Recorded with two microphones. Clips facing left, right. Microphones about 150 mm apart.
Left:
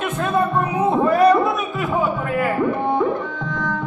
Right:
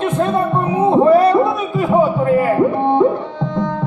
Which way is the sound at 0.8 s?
30° right (ahead or behind).